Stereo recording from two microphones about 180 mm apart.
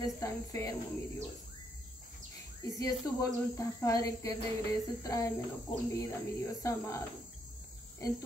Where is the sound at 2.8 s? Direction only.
20° left (ahead or behind).